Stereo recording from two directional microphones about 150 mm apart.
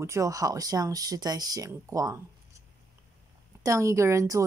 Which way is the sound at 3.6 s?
20° right (ahead or behind).